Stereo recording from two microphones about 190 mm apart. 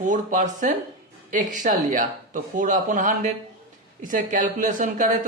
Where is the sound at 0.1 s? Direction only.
40° right (ahead or behind).